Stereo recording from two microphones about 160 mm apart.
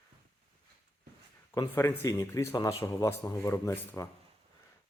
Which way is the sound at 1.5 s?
15° left (ahead or behind).